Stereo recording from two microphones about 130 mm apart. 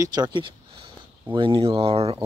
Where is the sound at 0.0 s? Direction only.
30° right (ahead or behind); by 2.1 s 50° right (ahead or behind).